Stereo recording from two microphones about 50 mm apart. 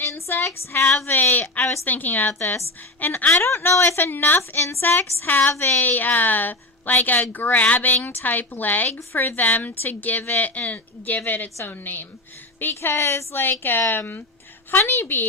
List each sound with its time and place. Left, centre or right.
0.0 s child singing: left
1.0 s a woman's voice: left
3.3 s a woman's voice: left
4.4 s speech: left
4.8 s a woman's voice: left
5.5 s speech: left
5.8 s a woman's voice: left
13.3 s a woman's voice: left